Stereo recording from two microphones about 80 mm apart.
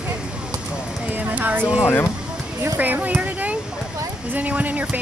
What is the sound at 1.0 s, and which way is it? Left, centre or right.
Speech, right.